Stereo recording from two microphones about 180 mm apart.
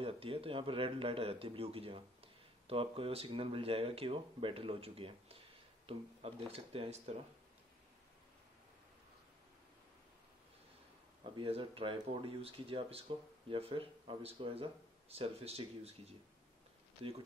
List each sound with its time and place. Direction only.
0.0 s speech: 30° right (ahead or behind)
11.3 s speech: 30° right (ahead or behind)
17.0 s speech: 30° right (ahead or behind)